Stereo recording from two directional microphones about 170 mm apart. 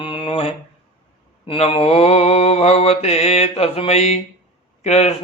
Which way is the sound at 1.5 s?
30° left (ahead or behind).